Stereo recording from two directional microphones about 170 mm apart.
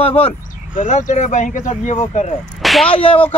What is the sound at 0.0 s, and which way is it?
Speech, 35° left (ahead or behind).